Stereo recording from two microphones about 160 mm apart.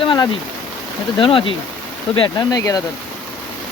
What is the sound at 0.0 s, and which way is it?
Stream, 30° left (ahead or behind).